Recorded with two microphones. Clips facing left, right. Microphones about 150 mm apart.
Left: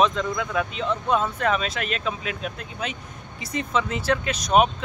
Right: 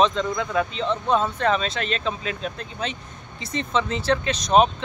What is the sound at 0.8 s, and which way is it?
Speech, 30° right (ahead or behind).